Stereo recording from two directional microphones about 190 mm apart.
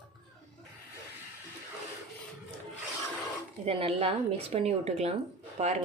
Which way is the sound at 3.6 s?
30° right (ahead or behind).